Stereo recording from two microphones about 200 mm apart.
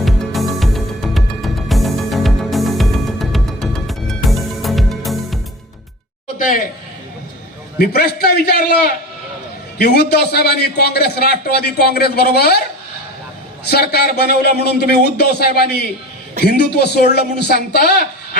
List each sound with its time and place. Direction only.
0.0 s music: centre (ahead or behind)
7.8 s a man's voice: 50° left (ahead or behind)
13.7 s a man's voice: 55° left (ahead or behind)